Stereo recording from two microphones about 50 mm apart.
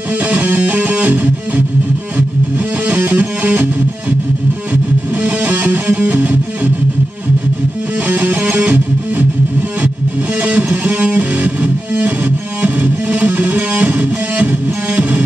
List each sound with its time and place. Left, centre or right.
0.1 s music: right
2.9 s music: right
5.1 s music: right
8.1 s music: right